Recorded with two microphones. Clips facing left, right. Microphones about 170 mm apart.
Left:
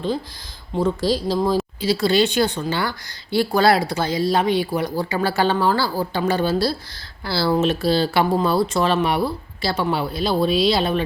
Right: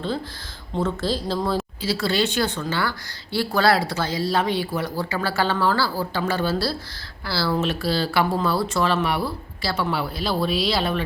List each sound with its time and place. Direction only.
0.8 s speech: 15° left (ahead or behind)